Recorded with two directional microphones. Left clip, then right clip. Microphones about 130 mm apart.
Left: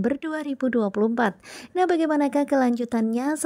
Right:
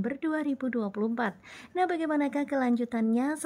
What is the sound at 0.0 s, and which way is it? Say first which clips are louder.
A woman's voice: left 4 dB; 35° left (ahead or behind).